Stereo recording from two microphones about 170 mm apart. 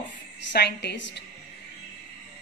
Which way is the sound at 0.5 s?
85° left.